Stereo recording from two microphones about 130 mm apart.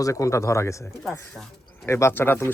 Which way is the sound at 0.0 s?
25° left (ahead or behind).